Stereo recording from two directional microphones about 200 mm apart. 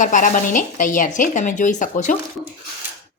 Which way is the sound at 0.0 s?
40° left (ahead or behind).